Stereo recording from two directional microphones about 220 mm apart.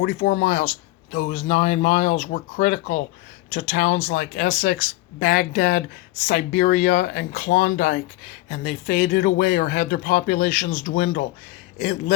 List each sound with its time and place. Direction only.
0.0 s speech: 40° left (ahead or behind)